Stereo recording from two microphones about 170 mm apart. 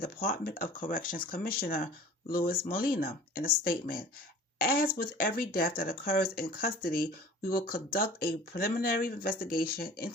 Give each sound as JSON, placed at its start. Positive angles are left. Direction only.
{"t": 0.0, "sound": "speech", "side_deg": 60}